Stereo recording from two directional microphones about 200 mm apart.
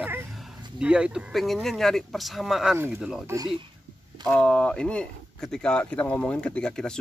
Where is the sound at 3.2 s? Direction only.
15° right (ahead or behind).